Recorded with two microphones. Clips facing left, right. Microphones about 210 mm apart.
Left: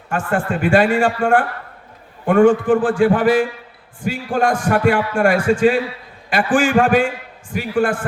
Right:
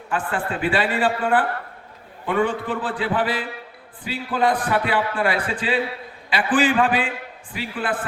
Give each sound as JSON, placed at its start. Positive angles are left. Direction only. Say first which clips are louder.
{"t": 0.1, "sound": "a man's voice", "louder": "left 5 dB", "side_deg": 45}